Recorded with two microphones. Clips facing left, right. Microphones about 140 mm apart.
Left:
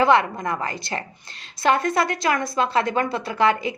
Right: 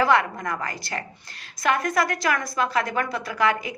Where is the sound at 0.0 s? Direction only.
25° left (ahead or behind).